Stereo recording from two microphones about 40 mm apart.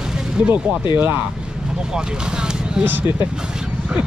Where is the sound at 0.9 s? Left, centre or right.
Right.